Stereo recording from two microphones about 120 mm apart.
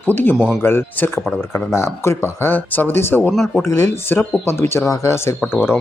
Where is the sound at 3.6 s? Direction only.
20° left (ahead or behind).